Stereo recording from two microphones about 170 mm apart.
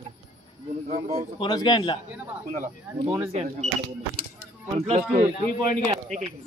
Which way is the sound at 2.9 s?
10° right (ahead or behind).